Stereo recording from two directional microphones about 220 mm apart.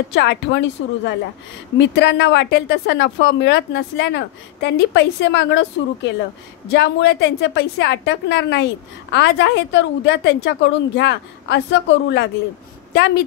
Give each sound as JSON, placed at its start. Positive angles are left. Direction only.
{"t": 0.1, "sound": "a woman's voice", "side_deg": 50}